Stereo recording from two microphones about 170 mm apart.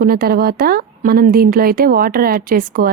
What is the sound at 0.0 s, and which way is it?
A woman's voice, 60° right (ahead or behind).